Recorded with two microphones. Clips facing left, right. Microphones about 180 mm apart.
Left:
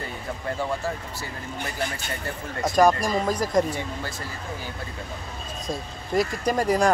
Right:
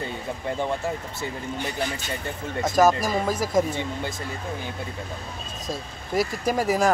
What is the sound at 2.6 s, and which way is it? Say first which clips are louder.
Speech: even; centre (ahead or behind).